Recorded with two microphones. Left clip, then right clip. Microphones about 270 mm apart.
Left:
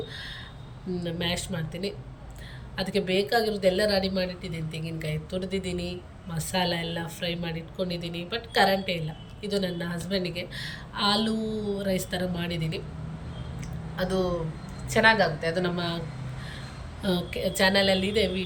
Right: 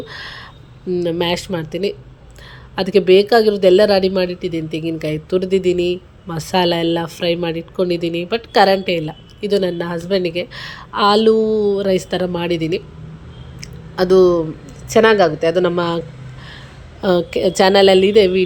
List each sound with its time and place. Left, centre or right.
0.1 s speech: centre
13.6 s a sound: centre
14.8 s speech: centre